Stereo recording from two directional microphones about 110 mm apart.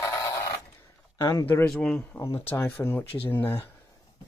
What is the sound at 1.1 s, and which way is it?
Speech, 35° left (ahead or behind).